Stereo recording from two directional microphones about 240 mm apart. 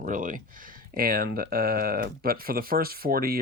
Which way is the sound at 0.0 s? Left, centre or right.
Right.